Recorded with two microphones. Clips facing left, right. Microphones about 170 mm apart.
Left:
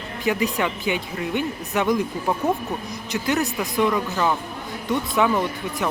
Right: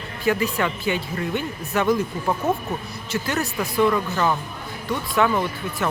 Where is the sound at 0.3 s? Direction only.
15° left (ahead or behind).